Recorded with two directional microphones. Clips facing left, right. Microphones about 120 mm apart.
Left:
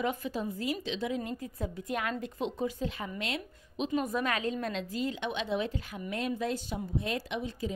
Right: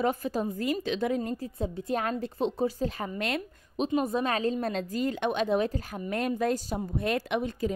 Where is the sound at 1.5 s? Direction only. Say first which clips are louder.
Right 5 dB; 30° right (ahead or behind); by 3.9 s 50° right (ahead or behind).